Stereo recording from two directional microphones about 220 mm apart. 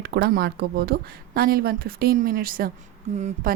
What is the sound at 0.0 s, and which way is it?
A woman's voice, 50° right (ahead or behind).